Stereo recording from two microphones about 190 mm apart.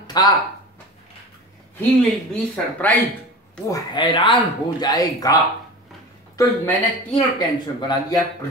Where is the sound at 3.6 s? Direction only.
20° left (ahead or behind).